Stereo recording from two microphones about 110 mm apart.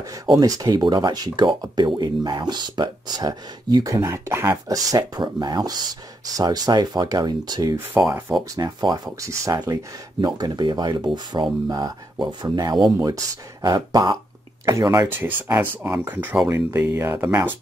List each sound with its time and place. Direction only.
0.4 s speech: 35° right (ahead or behind)
7.7 s speech: 25° right (ahead or behind)
8.5 s speech: 35° right (ahead or behind)